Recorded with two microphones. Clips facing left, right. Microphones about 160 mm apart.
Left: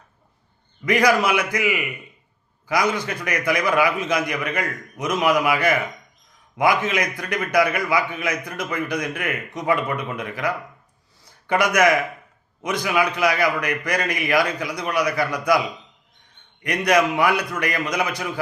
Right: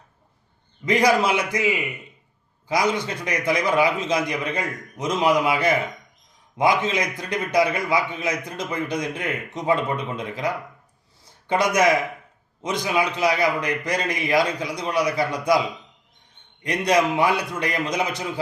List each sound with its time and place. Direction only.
0.9 s a man's voice: 25° right (ahead or behind)
2.9 s a man's voice: 25° right (ahead or behind)
16.6 s a man's voice: 25° right (ahead or behind)